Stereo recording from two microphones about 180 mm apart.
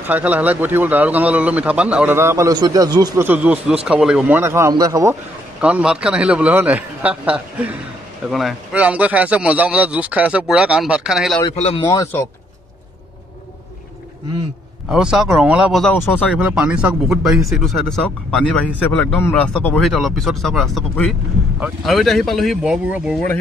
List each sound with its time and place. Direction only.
0.0 s a man's voice: 10° right (ahead or behind)
5.6 s a man's voice: 5° right (ahead or behind)
11.5 s a man's voice: 35° left (ahead or behind)
11.8 s speech: 20° left (ahead or behind)
14.9 s speech: 5° right (ahead or behind)
16.3 s speech: 5° right (ahead or behind)